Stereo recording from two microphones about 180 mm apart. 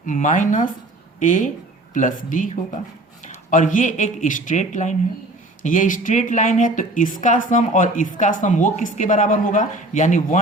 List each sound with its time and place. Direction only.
0.0 s speech: 45° left (ahead or behind)
3.5 s speech: 45° left (ahead or behind)